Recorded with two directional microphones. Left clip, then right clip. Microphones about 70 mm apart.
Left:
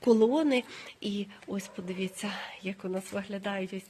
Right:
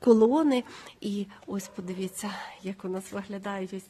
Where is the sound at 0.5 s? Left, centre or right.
Right.